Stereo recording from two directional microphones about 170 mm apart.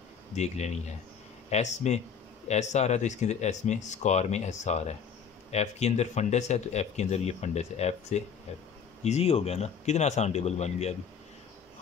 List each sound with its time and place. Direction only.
0.4 s speech: 40° left (ahead or behind)